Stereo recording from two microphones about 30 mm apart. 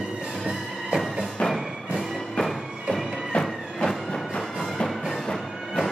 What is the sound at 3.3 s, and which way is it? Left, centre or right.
Music, left.